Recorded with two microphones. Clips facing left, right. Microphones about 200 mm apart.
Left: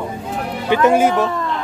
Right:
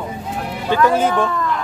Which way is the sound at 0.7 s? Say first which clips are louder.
Left 2 dB; 20° left (ahead or behind).